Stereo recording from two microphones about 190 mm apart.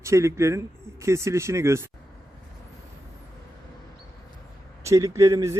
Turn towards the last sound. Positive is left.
turn(degrees=-15)  # may be behind; listen again after turning